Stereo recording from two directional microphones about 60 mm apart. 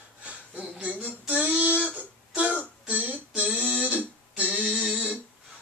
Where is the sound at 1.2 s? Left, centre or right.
Right.